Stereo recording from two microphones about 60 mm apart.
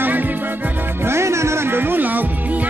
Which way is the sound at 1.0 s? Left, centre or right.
Right.